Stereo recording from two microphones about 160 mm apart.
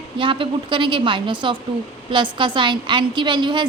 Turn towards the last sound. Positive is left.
turn(degrees=-30)  # may be behind; listen again after turning